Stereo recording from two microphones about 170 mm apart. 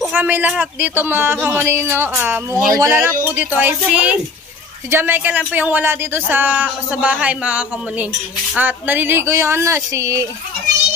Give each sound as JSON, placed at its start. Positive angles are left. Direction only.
{"t": 0.1, "sound": "speech", "side_deg": -10}